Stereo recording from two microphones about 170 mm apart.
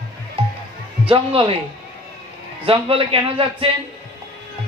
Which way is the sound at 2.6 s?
35° right (ahead or behind).